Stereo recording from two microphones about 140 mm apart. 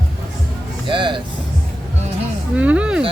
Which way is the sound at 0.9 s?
35° right (ahead or behind).